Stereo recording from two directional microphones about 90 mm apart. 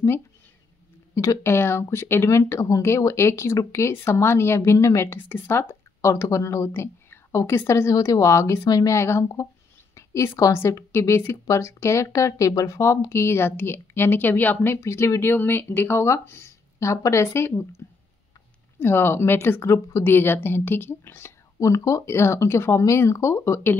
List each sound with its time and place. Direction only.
1.1 s a woman's voice: 35° left (ahead or behind)
14.8 s a woman's voice: 35° left (ahead or behind)